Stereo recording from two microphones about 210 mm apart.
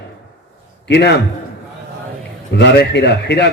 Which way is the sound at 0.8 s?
55° left (ahead or behind).